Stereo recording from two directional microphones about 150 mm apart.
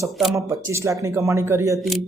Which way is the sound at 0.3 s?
20° right (ahead or behind).